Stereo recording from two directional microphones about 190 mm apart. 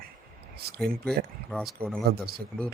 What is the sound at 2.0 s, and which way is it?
Speech, 55° right (ahead or behind).